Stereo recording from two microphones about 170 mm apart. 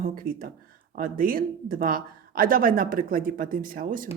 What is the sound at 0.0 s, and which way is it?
A woman's voice, 55° right (ahead or behind).